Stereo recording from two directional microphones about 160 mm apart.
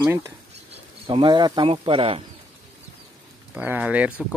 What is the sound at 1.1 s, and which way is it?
Speech, 30° right (ahead or behind).